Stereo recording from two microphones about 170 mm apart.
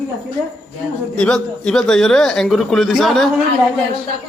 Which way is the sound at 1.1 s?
5° left (ahead or behind).